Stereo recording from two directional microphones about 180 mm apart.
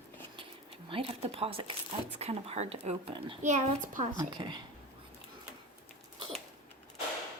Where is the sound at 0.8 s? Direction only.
30° right (ahead or behind).